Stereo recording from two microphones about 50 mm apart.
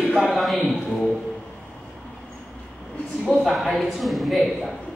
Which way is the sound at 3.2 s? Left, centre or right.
Centre.